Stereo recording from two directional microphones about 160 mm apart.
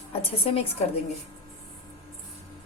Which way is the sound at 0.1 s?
35° left (ahead or behind).